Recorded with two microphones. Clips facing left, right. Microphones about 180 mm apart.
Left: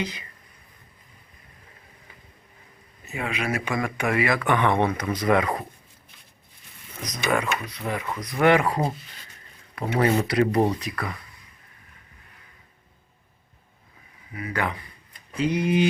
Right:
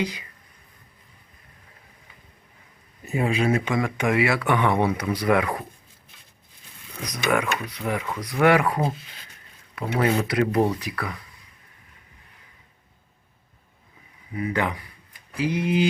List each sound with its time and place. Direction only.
0.0 s speech: 15° right (ahead or behind)
3.1 s speech: 30° right (ahead or behind); by 5.2 s 10° right (ahead or behind)
7.0 s speech: 5° right (ahead or behind)
8.0 s speech: 10° left (ahead or behind)
8.4 s speech: 5° right (ahead or behind)
10.0 s speech: centre (ahead or behind)
10.6 s speech: 20° left (ahead or behind)
10.9 s speech: centre (ahead or behind)
14.3 s speech: 20° right (ahead or behind); by 15.9 s 5° right (ahead or behind)